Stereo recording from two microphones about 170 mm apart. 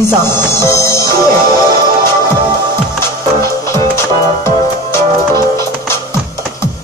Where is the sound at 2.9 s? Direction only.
15° left (ahead or behind).